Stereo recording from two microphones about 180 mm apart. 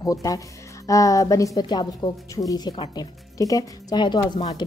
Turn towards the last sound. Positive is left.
turn(degrees=25)  # may be behind; listen again after turning